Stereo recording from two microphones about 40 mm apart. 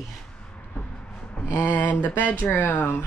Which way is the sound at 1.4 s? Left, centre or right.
Left.